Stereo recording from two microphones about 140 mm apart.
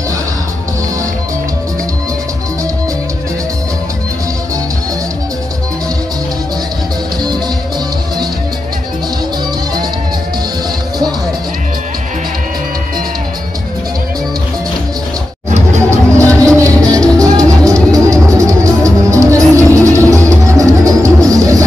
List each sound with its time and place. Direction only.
15.5 s music: 55° right (ahead or behind)
16.2 s music: 20° right (ahead or behind)